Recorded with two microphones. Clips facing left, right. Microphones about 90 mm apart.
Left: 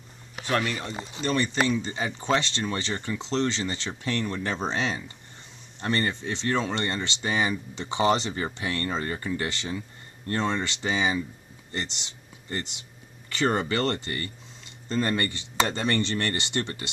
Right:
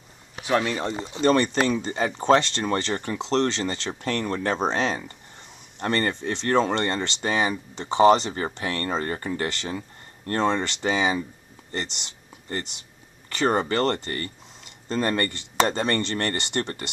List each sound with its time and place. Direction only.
1.2 s speech: 55° right (ahead or behind); by 8.5 s 35° right (ahead or behind)
8.5 s speech: 45° right (ahead or behind)
9.5 s speech: 50° right (ahead or behind)